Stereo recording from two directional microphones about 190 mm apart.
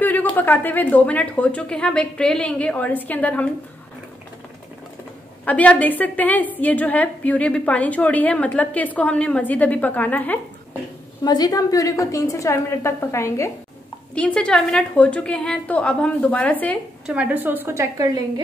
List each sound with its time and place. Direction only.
0.0 s a woman's voice: 10° left (ahead or behind)
5.4 s a woman's voice: 5° left (ahead or behind)
11.2 s a woman's voice: 20° left (ahead or behind)
17.0 s a woman's voice: 5° right (ahead or behind)